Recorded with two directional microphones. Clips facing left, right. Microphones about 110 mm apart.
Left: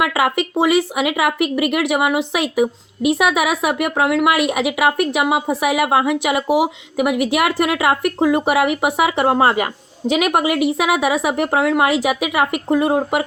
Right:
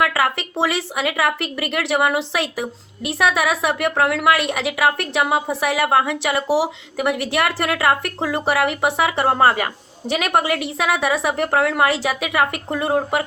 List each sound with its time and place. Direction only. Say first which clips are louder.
0.0 s a woman's voice: left 2 dB; 15° left (ahead or behind)